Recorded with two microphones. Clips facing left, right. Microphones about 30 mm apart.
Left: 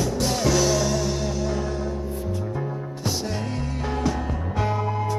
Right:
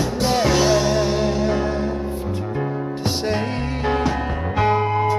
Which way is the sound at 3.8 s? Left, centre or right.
Right.